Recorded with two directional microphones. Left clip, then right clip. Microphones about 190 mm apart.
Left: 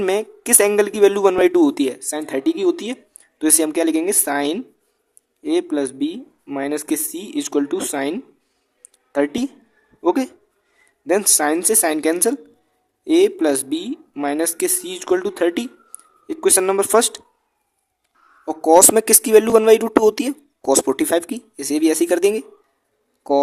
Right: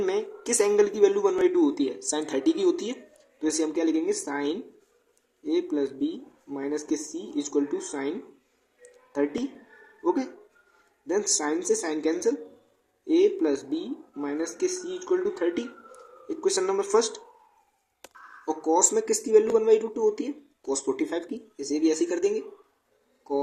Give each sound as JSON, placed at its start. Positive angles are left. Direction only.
{"t": 0.0, "sound": "a man's voice", "side_deg": 40}
{"t": 9.1, "sound": "a man's voice", "side_deg": 45}
{"t": 11.3, "sound": "a man's voice", "side_deg": 45}
{"t": 18.4, "sound": "a man's voice", "side_deg": 50}